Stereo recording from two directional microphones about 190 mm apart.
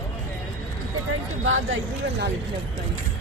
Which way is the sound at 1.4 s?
90° right.